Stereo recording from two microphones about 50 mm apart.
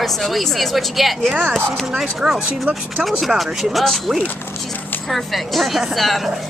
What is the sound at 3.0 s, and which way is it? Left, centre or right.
Speech, centre.